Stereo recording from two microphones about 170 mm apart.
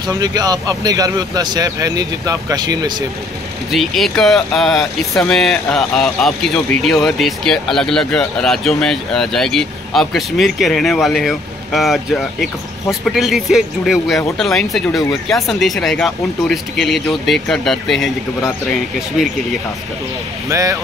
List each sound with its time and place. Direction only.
0.2 s speech: 25° right (ahead or behind)
3.7 s speech: centre (ahead or behind)
20.4 s speech: 20° right (ahead or behind)